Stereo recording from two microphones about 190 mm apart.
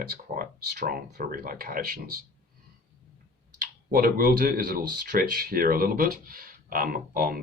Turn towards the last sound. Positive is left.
turn(degrees=-50)  # may be behind; listen again after turning